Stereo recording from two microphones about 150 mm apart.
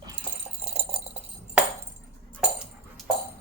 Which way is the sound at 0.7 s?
45° right (ahead or behind).